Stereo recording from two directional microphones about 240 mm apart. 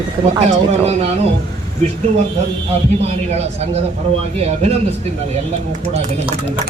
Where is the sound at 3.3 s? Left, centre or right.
Right.